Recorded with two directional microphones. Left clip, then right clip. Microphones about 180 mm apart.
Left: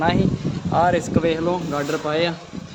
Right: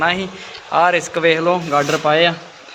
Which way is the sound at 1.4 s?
20° right (ahead or behind).